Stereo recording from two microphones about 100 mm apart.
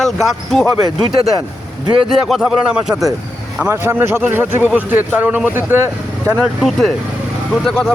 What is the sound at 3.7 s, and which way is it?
Speech, 25° right (ahead or behind).